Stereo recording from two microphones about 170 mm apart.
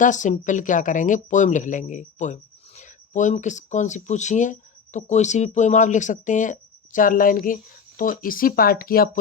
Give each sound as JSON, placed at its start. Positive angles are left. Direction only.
{"t": 0.0, "sound": "speech", "side_deg": 45}